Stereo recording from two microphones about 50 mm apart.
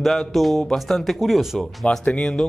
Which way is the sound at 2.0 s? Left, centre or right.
Left.